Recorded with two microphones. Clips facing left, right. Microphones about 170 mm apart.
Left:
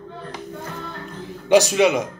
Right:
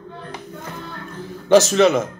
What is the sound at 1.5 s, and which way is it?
Speech, 15° left (ahead or behind).